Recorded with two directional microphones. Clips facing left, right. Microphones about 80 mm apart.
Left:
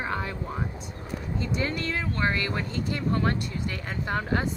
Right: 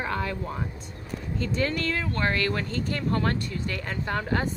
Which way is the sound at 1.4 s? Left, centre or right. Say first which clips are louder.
Right 3 dB; centre.